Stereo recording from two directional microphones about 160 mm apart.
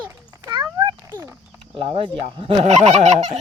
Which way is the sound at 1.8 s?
30° right (ahead or behind).